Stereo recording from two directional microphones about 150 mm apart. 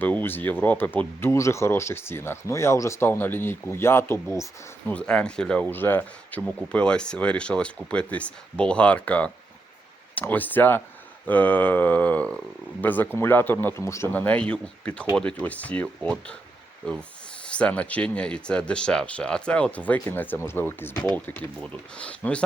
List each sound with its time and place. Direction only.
0.0 s speech: 15° left (ahead or behind)